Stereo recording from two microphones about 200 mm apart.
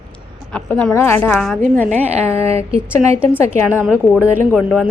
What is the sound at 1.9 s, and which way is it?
Speech, 30° right (ahead or behind).